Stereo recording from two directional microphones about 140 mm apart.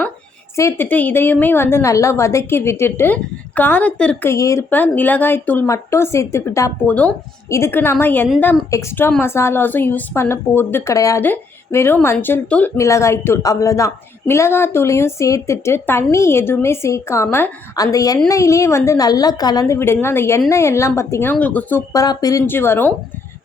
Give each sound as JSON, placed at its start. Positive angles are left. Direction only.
{"t": 0.5, "sound": "a woman's voice", "side_deg": 20}
{"t": 4.3, "sound": "a woman's voice", "side_deg": 20}
{"t": 21.9, "sound": "a woman's voice", "side_deg": 25}